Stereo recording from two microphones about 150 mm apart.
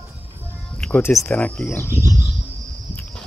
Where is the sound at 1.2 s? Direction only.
10° left (ahead or behind).